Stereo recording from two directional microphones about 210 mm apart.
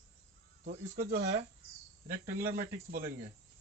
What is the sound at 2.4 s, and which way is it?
Speech, 45° right (ahead or behind).